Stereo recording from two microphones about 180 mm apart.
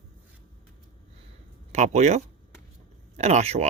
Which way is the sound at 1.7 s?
40° right (ahead or behind).